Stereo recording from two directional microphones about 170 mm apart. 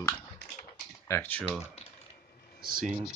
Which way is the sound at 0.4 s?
75° left (ahead or behind).